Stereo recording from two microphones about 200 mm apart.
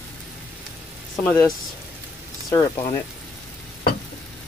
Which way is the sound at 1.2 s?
5° left (ahead or behind).